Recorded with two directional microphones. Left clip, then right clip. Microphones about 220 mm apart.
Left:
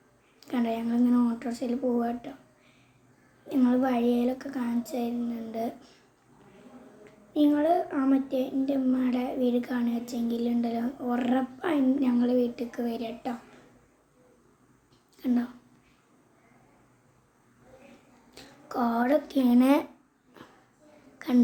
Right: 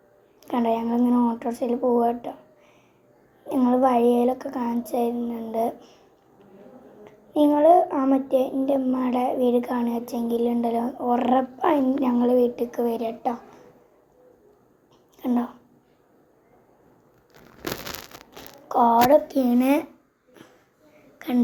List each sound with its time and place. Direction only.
0.3 s a woman's voice: centre (ahead or behind)
3.5 s speech: centre (ahead or behind)
7.0 s a child's voice: centre (ahead or behind)
15.2 s speech: centre (ahead or behind)
18.7 s a woman's voice: 35° left (ahead or behind)
19.1 s speech: 5° right (ahead or behind)
21.2 s whispering: centre (ahead or behind)